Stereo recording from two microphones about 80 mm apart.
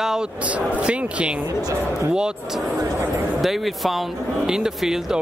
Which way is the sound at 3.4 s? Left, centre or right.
Centre.